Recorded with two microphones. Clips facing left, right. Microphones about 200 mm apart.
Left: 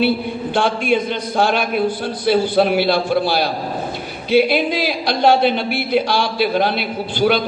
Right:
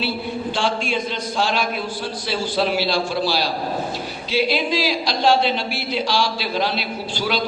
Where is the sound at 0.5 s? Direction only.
55° left (ahead or behind).